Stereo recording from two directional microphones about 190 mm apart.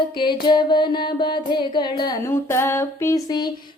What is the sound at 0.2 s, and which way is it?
Music, 25° left (ahead or behind).